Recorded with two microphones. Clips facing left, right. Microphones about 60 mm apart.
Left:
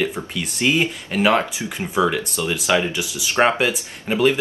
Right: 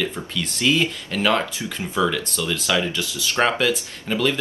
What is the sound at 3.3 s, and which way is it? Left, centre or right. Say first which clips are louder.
Speech: left 2 dB; left.